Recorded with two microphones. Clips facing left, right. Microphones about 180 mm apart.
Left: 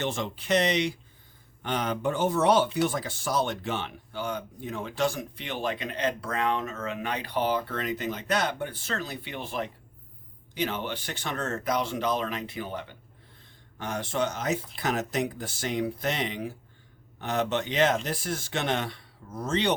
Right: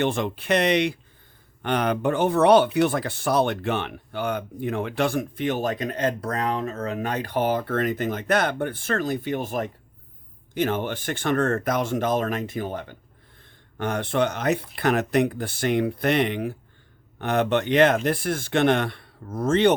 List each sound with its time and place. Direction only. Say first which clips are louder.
0.0 s speech: right 7 dB; 60° right (ahead or behind)
13.7 s speech: right 6 dB; 60° right (ahead or behind)